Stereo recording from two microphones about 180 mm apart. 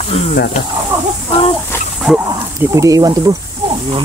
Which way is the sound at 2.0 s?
5° right (ahead or behind).